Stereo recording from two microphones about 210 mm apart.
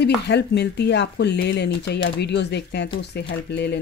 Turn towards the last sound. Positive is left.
turn(degrees=50)  # may be behind; listen again after turning